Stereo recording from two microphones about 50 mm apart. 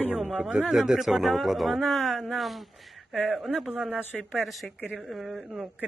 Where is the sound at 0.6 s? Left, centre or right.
Centre.